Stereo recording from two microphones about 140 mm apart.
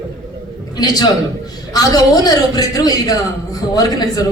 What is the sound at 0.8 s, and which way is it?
A woman's voice, 30° left (ahead or behind).